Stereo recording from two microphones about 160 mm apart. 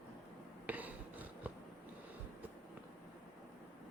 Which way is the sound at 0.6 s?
10° right (ahead or behind).